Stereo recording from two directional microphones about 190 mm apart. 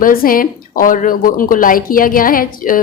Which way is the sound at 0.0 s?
50° left (ahead or behind).